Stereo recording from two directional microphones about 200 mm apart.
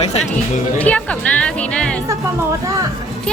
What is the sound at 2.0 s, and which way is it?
Speech, 15° right (ahead or behind).